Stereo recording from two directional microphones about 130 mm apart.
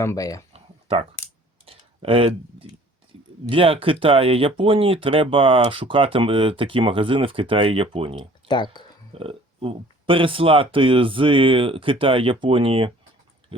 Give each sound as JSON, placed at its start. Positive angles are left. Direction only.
{"t": 0.0, "sound": "speech", "side_deg": 25}
{"t": 0.5, "sound": "a sound", "side_deg": -50}
{"t": 1.6, "sound": "tick-tock", "side_deg": -45}
{"t": 3.5, "sound": "speech", "side_deg": -45}
{"t": 8.4, "sound": "speech", "side_deg": 35}
{"t": 9.1, "sound": "speech", "side_deg": -45}
{"t": 13.5, "sound": "a sound", "side_deg": -45}